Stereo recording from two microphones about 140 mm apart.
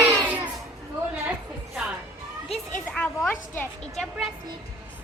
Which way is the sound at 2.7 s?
10° left (ahead or behind).